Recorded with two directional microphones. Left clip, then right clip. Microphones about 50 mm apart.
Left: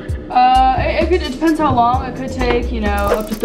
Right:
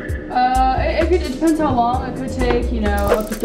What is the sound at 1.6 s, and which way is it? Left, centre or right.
Speech, left.